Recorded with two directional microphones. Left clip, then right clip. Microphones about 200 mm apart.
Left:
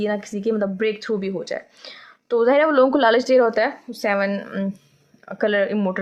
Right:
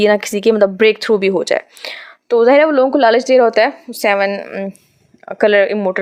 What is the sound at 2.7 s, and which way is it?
Speech, 25° right (ahead or behind).